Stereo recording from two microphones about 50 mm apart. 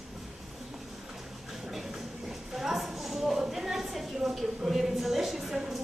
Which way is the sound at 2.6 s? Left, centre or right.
Centre.